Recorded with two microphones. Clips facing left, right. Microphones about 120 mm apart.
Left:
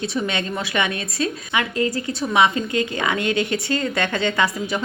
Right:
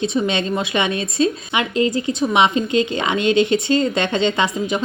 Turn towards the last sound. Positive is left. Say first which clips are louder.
# right 2 dB
turn(degrees=-20)  # may be behind; listen again after turning